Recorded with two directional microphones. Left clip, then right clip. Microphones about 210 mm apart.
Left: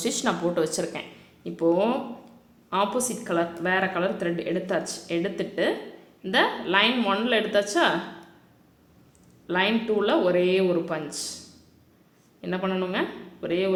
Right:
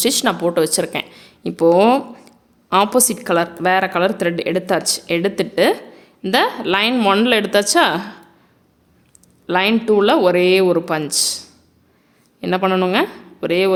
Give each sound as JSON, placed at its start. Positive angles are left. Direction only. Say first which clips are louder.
{"t": 0.0, "sound": "a woman's voice", "louder": "right 9 dB", "side_deg": -40}
{"t": 1.5, "sound": "a woman's voice", "louder": "right 11 dB", "side_deg": -55}
{"t": 9.5, "sound": "a woman's voice", "louder": "right 8 dB", "side_deg": -50}
{"t": 12.4, "sound": "speech", "louder": "right 11 dB", "side_deg": -50}